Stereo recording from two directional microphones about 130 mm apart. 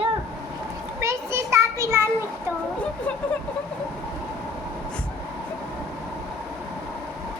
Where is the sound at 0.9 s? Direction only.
20° right (ahead or behind).